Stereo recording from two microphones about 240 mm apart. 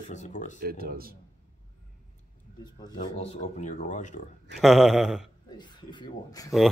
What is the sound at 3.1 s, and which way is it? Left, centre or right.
Speech, left.